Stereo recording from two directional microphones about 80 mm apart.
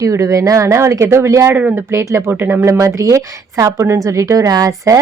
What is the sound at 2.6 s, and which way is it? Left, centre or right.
A woman's voice, right.